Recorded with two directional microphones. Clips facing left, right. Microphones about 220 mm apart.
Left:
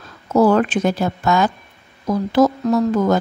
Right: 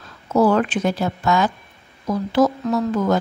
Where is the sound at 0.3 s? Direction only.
40° left (ahead or behind).